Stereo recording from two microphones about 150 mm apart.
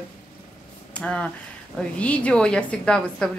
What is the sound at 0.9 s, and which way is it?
A woman's voice, 5° left (ahead or behind).